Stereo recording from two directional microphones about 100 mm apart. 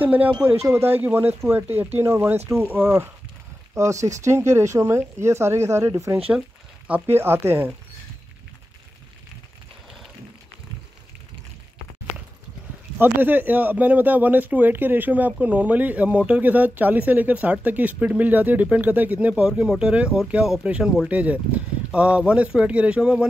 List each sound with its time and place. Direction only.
0.0 s speech: 15° right (ahead or behind)
0.5 s speech: 30° right (ahead or behind)
13.0 s speech: 20° right (ahead or behind)